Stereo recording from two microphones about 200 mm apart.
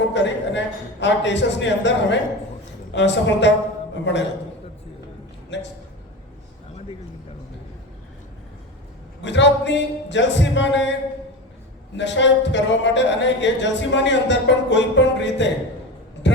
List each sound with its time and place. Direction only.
0.1 s speech: 65° left (ahead or behind)
5.5 s speech: 65° left (ahead or behind)
9.2 s speech: 65° left (ahead or behind)
11.9 s speech: 65° left (ahead or behind)
16.2 s a sound: 60° left (ahead or behind)